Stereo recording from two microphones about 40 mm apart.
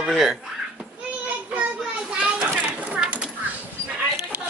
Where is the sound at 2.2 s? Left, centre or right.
Right.